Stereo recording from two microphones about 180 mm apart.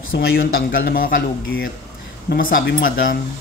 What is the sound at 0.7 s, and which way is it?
Speech, 55° left (ahead or behind).